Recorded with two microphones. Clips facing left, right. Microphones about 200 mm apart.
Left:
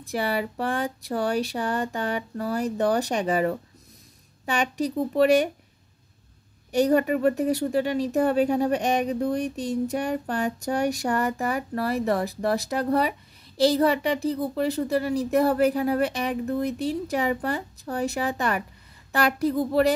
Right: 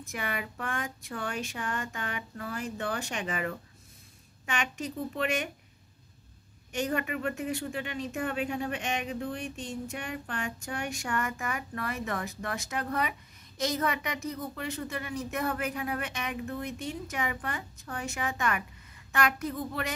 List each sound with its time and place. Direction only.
0.0 s speech: 35° left (ahead or behind)
6.7 s speech: 35° left (ahead or behind)